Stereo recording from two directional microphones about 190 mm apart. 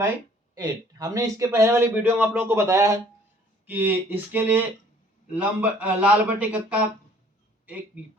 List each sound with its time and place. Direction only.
0.5 s a man's voice: 20° right (ahead or behind)